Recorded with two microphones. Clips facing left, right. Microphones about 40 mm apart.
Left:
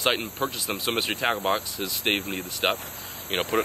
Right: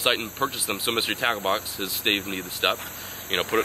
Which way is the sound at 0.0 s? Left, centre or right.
Centre.